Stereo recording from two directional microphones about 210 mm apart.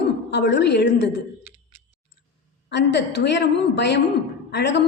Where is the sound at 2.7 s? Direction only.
55° left (ahead or behind).